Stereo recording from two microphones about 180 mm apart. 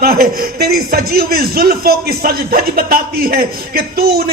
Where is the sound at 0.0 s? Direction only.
60° right (ahead or behind).